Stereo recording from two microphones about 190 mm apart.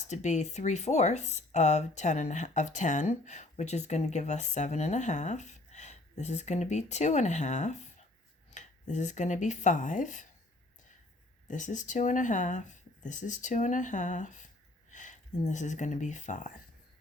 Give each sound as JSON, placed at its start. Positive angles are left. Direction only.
{"t": 0.1, "sound": "speech", "side_deg": 40}
{"t": 11.4, "sound": "speech", "side_deg": 40}